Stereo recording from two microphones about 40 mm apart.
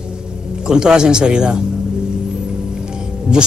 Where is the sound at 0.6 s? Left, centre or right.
Centre.